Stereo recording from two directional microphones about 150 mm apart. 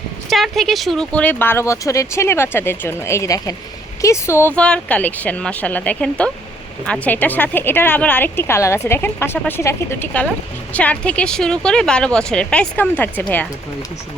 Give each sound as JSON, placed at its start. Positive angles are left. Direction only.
{"t": 0.3, "sound": "speech", "side_deg": 0}